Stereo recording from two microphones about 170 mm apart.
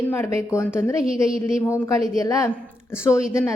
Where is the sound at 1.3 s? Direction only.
5° right (ahead or behind).